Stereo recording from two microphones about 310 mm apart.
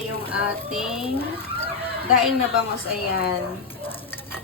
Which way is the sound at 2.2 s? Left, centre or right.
Centre.